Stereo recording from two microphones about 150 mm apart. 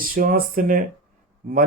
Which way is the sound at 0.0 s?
70° right (ahead or behind).